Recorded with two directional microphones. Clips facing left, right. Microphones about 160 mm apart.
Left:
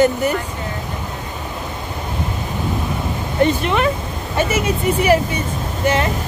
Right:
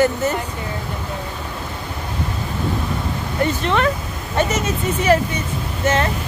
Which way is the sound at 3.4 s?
10° left (ahead or behind).